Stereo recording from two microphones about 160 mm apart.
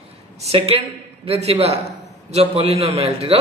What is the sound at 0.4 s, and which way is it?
Speech, 40° right (ahead or behind).